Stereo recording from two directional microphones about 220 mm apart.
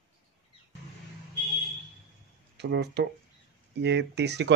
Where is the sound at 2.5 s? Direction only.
50° right (ahead or behind).